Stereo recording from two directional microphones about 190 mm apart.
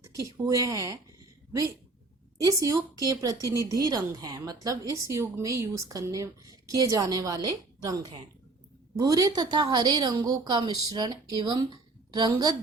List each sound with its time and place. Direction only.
0.2 s a woman's voice: 15° right (ahead or behind)
2.4 s a woman's voice: 15° right (ahead or behind)